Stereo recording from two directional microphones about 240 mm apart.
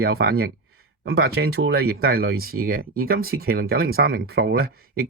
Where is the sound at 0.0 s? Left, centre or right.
Right.